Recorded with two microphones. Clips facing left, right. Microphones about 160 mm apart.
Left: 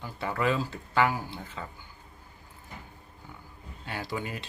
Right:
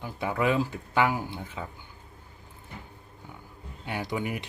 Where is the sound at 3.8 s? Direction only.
20° right (ahead or behind).